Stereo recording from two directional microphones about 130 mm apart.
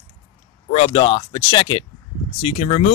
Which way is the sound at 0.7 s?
50° left (ahead or behind).